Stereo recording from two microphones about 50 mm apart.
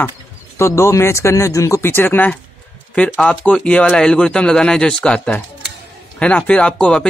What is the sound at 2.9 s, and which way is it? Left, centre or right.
A man's voice, left.